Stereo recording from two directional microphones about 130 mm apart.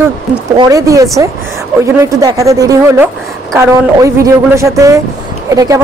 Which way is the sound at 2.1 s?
25° right (ahead or behind).